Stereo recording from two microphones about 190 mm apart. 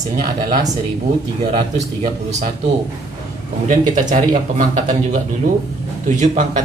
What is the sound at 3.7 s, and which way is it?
A man's voice, 45° right (ahead or behind).